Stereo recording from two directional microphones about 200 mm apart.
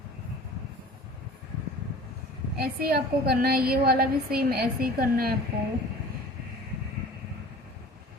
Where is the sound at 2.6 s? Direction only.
50° right (ahead or behind).